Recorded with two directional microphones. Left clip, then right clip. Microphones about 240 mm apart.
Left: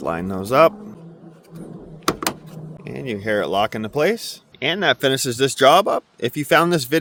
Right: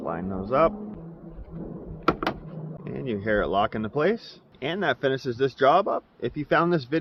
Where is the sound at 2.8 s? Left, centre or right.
Left.